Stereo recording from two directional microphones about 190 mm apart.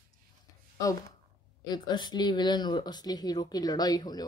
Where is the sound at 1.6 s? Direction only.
20° left (ahead or behind).